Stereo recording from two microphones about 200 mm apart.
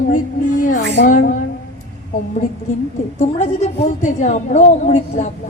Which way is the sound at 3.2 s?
35° left (ahead or behind).